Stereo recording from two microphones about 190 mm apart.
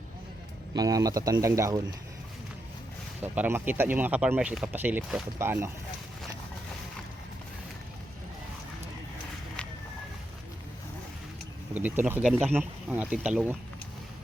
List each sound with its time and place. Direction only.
0.7 s speech: 20° right (ahead or behind)
3.3 s speech: 10° right (ahead or behind)
11.7 s speech: 10° right (ahead or behind)